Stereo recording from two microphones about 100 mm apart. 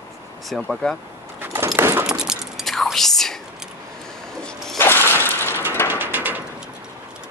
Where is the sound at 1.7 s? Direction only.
25° right (ahead or behind).